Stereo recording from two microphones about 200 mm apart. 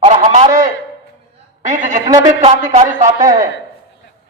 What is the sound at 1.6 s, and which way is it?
A man's voice, 40° right (ahead or behind).